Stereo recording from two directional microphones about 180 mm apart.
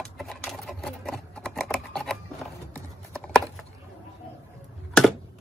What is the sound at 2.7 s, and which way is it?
Clip-clop, 5° left (ahead or behind).